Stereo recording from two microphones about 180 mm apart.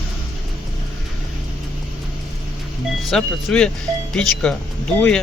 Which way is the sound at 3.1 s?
5° left (ahead or behind).